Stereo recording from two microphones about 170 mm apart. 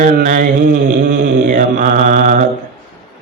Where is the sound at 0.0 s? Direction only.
55° right (ahead or behind).